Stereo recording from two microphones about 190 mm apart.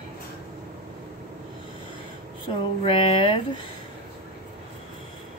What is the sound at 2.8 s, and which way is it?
Speech, 30° left (ahead or behind).